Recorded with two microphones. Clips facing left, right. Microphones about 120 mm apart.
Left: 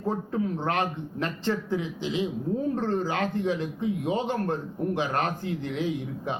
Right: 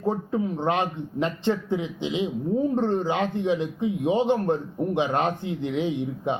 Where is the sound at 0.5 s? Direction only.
20° right (ahead or behind).